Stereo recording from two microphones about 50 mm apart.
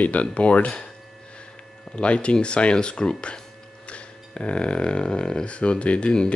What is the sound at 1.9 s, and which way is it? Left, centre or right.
Speech, left.